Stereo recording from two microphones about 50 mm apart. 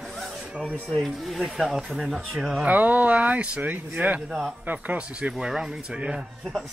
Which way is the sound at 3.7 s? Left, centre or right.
Right.